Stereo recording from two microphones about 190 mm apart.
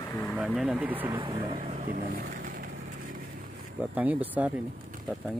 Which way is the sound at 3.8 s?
10° right (ahead or behind).